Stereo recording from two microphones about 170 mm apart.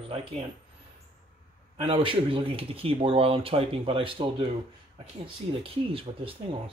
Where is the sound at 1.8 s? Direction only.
30° right (ahead or behind).